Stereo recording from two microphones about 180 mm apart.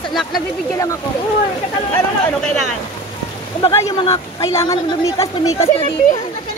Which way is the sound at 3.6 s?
25° left (ahead or behind).